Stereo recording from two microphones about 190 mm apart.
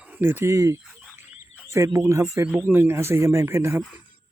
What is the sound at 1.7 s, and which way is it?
Speech, 15° right (ahead or behind).